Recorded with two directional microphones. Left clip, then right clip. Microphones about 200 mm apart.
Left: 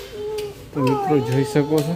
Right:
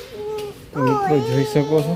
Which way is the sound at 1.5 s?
Centre (ahead or behind).